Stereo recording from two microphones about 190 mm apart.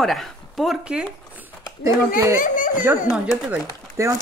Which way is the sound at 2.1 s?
15° right (ahead or behind).